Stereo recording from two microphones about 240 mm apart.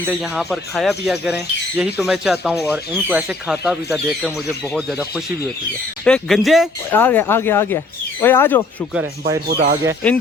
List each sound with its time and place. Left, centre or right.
0.0 s speech: centre
6.1 s speech: centre
9.5 s speech: right